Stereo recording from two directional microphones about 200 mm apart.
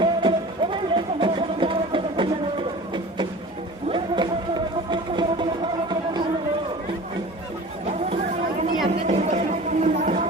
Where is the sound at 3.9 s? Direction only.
25° right (ahead or behind).